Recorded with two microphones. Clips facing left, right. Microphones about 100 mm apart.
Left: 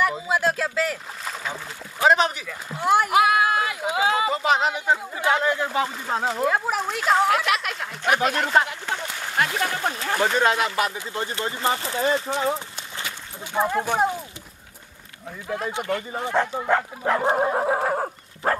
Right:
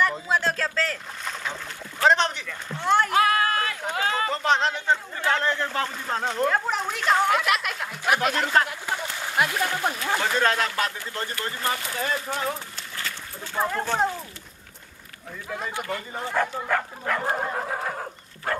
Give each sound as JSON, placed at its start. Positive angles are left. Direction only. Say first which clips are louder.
{"t": 0.0, "sound": "speech", "louder": "left 2 dB", "side_deg": 10}
{"t": 2.0, "sound": "a sound", "louder": "left 2 dB", "side_deg": 5}
{"t": 9.2, "sound": "speech", "louder": "even", "side_deg": 0}
{"t": 10.1, "sound": "speech", "louder": "left 4 dB", "side_deg": 20}
{"t": 15.4, "sound": "speech", "louder": "left 4 dB", "side_deg": 5}
{"t": 16.1, "sound": "speech", "louder": "even", "side_deg": 15}
{"t": 17.6, "sound": "neigh", "louder": "left 7 dB", "side_deg": 35}